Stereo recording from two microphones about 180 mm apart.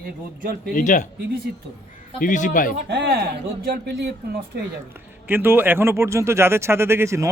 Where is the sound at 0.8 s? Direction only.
45° left (ahead or behind).